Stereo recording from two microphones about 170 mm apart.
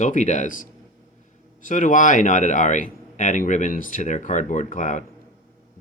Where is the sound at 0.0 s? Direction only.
45° left (ahead or behind).